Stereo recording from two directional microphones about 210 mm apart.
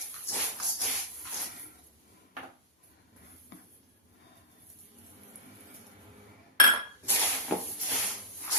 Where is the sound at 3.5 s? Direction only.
55° left (ahead or behind).